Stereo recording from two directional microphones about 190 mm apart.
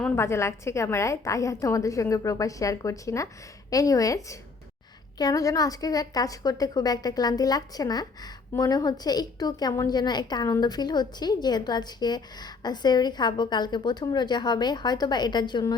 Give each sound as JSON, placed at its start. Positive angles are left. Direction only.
{"t": 0.0, "sound": "a woman's voice", "side_deg": 15}